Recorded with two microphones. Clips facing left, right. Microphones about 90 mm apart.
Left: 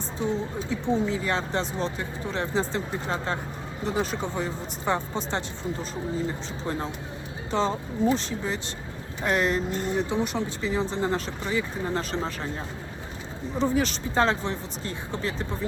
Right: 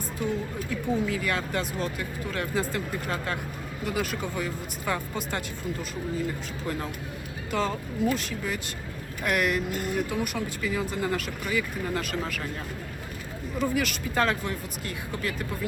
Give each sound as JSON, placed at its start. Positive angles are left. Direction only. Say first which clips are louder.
{"t": 0.2, "sound": "speech", "louder": "left 2 dB", "side_deg": 25}
{"t": 13.6, "sound": "speech", "louder": "left 3 dB", "side_deg": 30}